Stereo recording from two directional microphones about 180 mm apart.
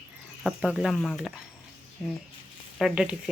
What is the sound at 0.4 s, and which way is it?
Speech, 5° right (ahead or behind).